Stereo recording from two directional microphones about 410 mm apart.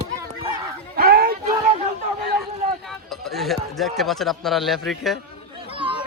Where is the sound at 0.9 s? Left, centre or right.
Right.